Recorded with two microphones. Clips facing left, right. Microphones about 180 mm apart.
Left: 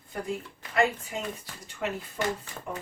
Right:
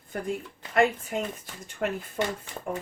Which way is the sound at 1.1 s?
55° right (ahead or behind).